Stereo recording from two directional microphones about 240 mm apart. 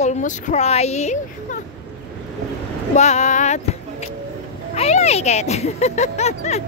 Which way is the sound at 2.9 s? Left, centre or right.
Left.